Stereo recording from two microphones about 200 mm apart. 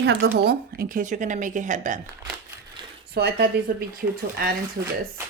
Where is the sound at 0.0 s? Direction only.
55° right (ahead or behind); by 2.0 s 40° right (ahead or behind).